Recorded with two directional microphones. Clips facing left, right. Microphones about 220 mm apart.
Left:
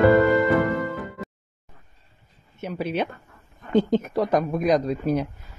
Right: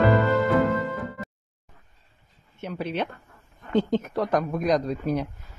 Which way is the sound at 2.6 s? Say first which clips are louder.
Left 3 dB; 5° left (ahead or behind).